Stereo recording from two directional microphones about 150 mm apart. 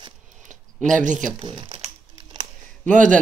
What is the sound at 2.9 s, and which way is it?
Speech, 60° right (ahead or behind).